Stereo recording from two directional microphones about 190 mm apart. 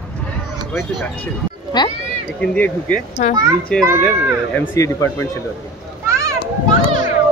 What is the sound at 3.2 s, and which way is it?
Speech, 40° left (ahead or behind).